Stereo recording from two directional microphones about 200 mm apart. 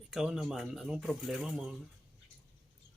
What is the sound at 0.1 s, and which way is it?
Speech, centre (ahead or behind).